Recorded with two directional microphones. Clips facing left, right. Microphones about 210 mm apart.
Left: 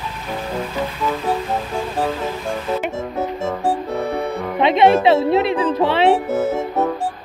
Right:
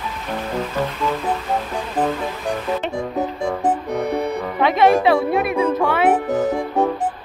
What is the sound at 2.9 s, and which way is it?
Music, 15° right (ahead or behind).